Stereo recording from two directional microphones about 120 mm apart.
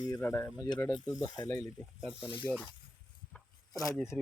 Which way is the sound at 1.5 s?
20° left (ahead or behind).